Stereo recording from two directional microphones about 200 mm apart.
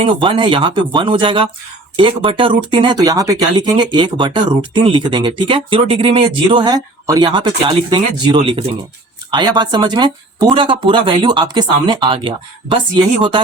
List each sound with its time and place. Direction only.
0.0 s speech: 25° right (ahead or behind)